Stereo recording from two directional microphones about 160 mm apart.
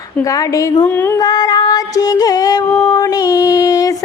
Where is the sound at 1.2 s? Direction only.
25° left (ahead or behind).